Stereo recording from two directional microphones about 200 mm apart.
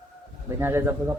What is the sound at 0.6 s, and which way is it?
Speech, 10° right (ahead or behind).